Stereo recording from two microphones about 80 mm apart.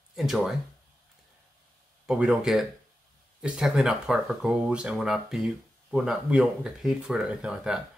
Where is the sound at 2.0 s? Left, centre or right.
Centre.